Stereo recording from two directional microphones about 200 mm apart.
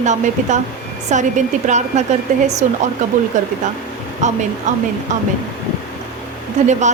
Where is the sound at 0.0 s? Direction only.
35° right (ahead or behind).